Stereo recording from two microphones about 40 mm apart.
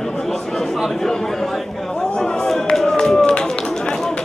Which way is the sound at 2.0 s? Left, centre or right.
Left.